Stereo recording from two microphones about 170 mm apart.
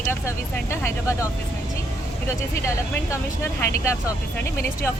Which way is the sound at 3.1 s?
15° left (ahead or behind).